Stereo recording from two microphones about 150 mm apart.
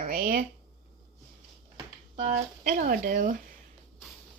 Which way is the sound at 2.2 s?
55° right (ahead or behind).